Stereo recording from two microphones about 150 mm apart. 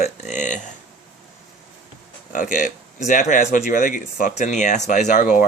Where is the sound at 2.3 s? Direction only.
60° left (ahead or behind).